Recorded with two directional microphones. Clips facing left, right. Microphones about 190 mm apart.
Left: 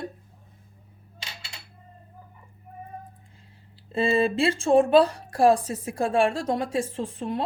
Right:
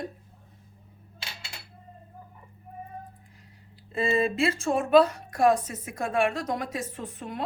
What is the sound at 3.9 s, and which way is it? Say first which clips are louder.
A woman's voice: left 3 dB; 30° left (ahead or behind).